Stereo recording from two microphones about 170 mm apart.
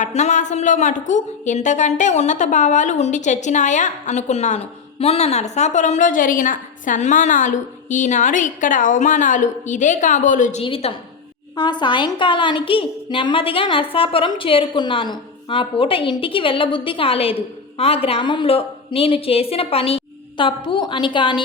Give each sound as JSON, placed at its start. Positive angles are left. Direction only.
{"t": 0.0, "sound": "a woman's voice", "side_deg": 45}
{"t": 10.6, "sound": "a woman's voice", "side_deg": 35}